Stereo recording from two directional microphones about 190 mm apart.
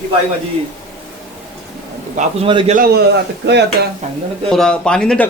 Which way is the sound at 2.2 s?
30° right (ahead or behind).